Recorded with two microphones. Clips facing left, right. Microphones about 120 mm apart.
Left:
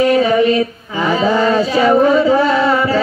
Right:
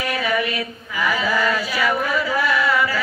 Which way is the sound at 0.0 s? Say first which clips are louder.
Left 11 dB; 30° left (ahead or behind).